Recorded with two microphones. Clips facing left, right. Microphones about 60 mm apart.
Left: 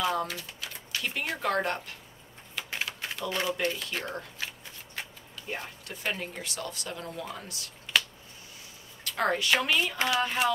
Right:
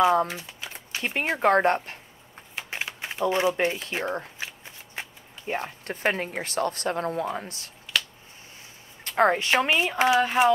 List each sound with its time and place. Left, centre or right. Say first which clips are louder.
0.0 s speech: right 8 dB; right
2.5 s typewriter: right 1 dB; right
3.6 s speech: right 5 dB; right
4.4 s shuffling cards: right 2 dB; right
5.5 s speech: right 7 dB; right
9.0 s speech: right 6 dB; right